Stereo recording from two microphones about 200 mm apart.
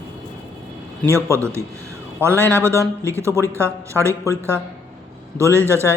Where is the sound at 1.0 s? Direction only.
15° right (ahead or behind).